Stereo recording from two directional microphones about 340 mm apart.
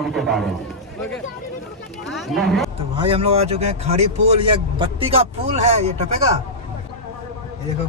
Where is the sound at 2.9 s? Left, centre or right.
Centre.